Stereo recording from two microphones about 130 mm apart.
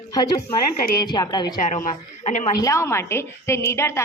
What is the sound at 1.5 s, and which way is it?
Speech, 80° left.